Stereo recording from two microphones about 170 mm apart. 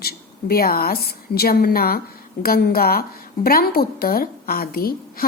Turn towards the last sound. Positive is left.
turn(degrees=60)  # may be behind; listen again after turning